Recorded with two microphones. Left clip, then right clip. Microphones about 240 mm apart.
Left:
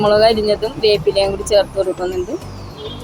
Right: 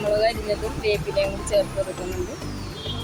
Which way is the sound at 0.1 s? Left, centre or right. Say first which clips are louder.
Left 7 dB; left.